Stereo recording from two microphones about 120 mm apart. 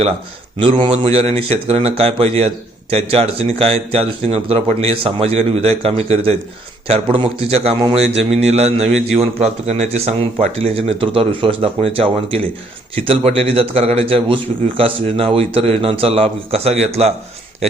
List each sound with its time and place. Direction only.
0.6 s speech: 50° right (ahead or behind)